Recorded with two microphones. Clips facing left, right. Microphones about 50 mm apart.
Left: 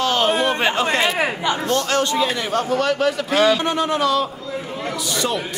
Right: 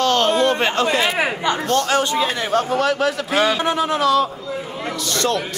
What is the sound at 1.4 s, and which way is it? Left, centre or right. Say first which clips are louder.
Speech: right 1 dB; right.